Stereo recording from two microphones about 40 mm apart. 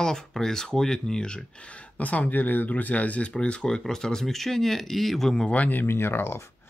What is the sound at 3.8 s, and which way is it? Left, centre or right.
Speech, centre.